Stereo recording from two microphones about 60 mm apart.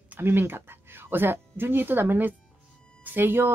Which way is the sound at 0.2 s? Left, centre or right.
Right.